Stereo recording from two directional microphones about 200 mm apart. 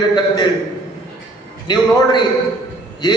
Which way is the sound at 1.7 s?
20° left (ahead or behind).